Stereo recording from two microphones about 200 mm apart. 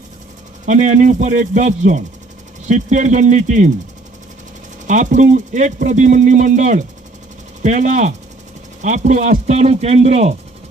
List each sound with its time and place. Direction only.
0.6 s speech: 40° right (ahead or behind)
4.9 s speech: 40° right (ahead or behind)